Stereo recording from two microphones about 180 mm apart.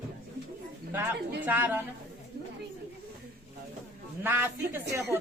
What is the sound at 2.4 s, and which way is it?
Chatter, 60° right (ahead or behind).